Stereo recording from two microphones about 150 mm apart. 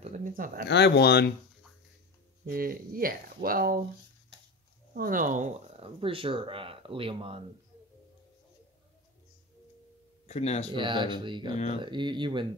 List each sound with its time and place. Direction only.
0.0 s a sound: 60° right (ahead or behind)
0.7 s speech: 90° left
2.4 s speech: 75° right (ahead or behind)
4.9 s speech: 70° right (ahead or behind)
5.8 s speech: 40° right (ahead or behind)
10.2 s speech: 50° left (ahead or behind)
10.7 s speech: 30° right (ahead or behind)